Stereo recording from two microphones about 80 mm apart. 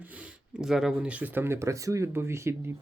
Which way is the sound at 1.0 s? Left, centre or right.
Centre.